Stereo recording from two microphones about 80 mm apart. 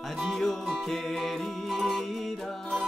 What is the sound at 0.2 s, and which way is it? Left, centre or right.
Music, centre.